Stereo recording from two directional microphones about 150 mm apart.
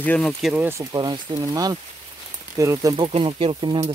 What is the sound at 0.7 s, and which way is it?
Speech, 25° right (ahead or behind).